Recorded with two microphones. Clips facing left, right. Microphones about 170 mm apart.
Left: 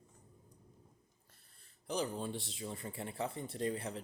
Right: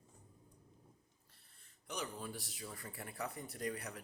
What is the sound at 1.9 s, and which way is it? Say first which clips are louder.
Speech: left 7 dB; 30° left (ahead or behind).